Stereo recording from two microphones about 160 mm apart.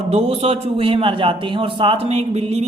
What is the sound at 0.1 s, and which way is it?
A man's voice, 40° right (ahead or behind).